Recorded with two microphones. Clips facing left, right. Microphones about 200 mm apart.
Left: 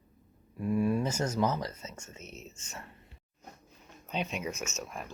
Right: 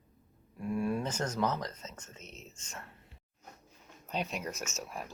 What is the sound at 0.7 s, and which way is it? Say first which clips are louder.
Speech: left 4 dB; centre (ahead or behind).